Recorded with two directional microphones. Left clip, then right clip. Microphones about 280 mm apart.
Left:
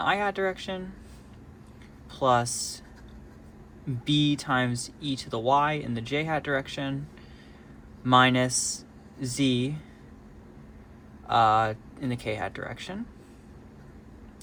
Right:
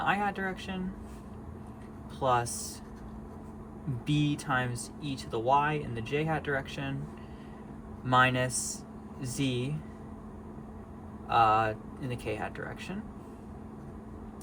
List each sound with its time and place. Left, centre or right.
0.0 s speech: left
2.1 s speech: left
4.0 s speech: left
8.0 s speech: left
11.3 s speech: left